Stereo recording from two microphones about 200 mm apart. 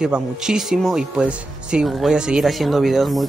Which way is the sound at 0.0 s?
5° right (ahead or behind).